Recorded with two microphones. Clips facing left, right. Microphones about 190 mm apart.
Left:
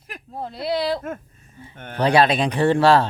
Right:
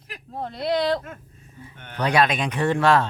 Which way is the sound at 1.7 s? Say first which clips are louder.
Left 11 dB; 45° left (ahead or behind).